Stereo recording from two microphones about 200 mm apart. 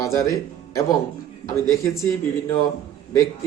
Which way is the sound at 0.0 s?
15° left (ahead or behind).